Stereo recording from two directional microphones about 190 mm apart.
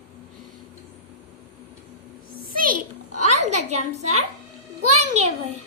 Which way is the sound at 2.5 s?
45° right (ahead or behind).